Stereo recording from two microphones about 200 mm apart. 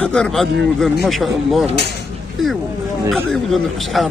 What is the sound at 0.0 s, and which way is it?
A man's voice, 5° left (ahead or behind).